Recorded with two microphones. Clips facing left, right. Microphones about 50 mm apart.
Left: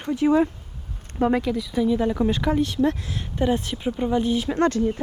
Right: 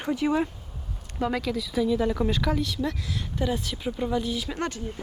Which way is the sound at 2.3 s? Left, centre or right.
Left.